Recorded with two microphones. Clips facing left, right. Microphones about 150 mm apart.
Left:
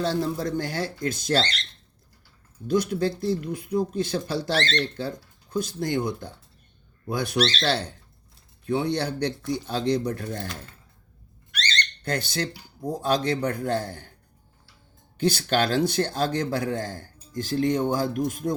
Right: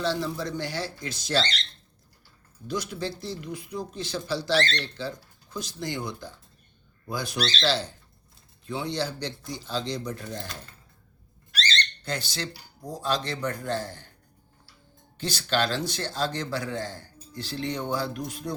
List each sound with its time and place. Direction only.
0.0 s a man's voice: 50° left (ahead or behind)
2.6 s a man's voice: 55° left (ahead or behind)
11.5 s a sound: 30° right (ahead or behind)
12.0 s a man's voice: 55° left (ahead or behind)
15.2 s a man's voice: 55° left (ahead or behind)